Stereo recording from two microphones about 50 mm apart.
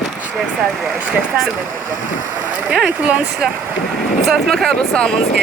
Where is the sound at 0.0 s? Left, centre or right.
Centre.